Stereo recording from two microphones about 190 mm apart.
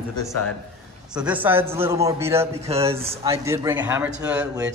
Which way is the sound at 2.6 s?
30° right (ahead or behind).